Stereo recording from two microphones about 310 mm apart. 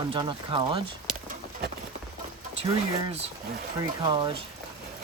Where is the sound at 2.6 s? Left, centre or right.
Centre.